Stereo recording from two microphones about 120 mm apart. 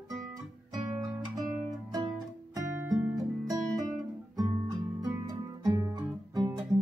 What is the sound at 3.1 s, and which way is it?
Music, 30° right (ahead or behind).